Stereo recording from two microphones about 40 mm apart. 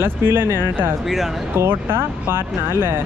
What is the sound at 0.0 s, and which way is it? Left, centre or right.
Speech, right.